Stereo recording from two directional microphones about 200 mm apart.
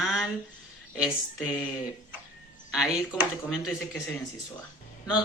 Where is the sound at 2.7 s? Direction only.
5° right (ahead or behind).